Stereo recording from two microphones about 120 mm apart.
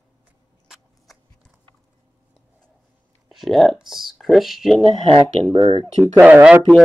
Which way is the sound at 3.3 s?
Centre (ahead or behind).